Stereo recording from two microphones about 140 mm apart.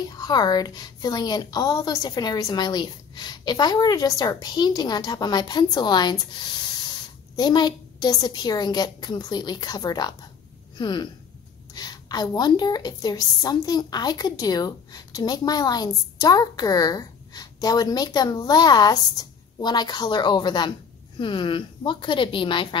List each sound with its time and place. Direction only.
0.1 s a woman's voice: 30° left (ahead or behind)